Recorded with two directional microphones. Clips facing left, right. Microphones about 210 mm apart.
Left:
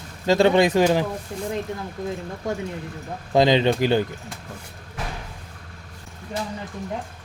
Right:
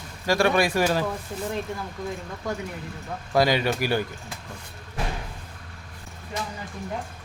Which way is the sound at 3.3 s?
20° left (ahead or behind).